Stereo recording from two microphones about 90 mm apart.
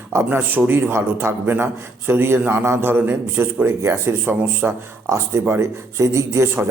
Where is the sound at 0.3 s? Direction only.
20° right (ahead or behind).